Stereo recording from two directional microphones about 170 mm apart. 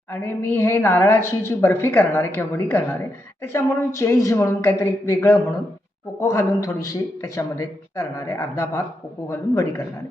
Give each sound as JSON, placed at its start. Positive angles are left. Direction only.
{"t": 0.1, "sound": "speech", "side_deg": 15}